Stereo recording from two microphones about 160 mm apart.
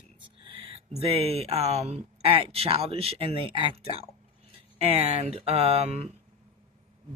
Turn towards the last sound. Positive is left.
turn(degrees=-40)  # may be behind; listen again after turning